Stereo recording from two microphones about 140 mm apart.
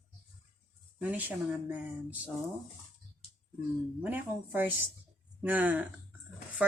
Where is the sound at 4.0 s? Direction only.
15° right (ahead or behind).